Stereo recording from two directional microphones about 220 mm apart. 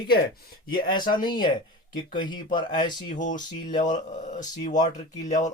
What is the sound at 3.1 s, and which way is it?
Speech, 35° left (ahead or behind).